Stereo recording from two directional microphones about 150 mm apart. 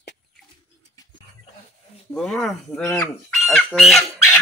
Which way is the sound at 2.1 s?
5° left (ahead or behind).